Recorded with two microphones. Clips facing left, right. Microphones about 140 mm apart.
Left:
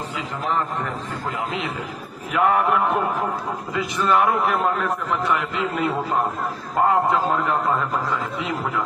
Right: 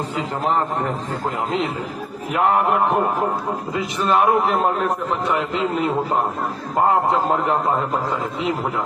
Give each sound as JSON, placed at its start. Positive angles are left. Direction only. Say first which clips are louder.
{"t": 2.3, "sound": "a man's voice", "louder": "right 1 dB", "side_deg": -35}
{"t": 3.8, "sound": "a man's voice", "louder": "right 1 dB", "side_deg": -25}